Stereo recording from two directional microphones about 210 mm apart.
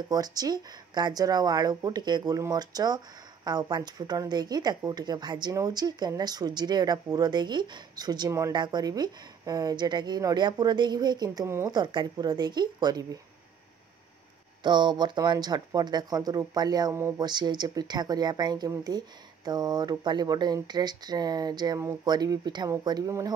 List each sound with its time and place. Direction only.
0.1 s speech: 20° right (ahead or behind)
14.6 s speech: 20° right (ahead or behind)